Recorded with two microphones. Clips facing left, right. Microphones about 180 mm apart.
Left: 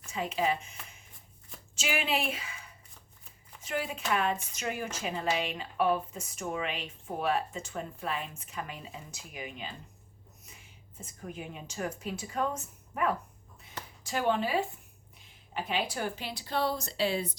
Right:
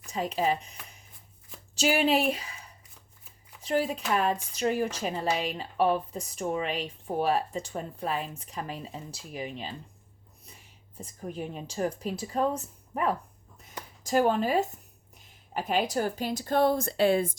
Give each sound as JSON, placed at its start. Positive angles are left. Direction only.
{"t": 0.1, "sound": "speech", "side_deg": -40}
{"t": 10.9, "sound": "speech", "side_deg": -35}